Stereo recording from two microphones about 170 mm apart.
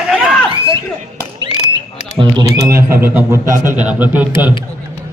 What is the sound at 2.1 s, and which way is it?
A man's voice, 25° right (ahead or behind).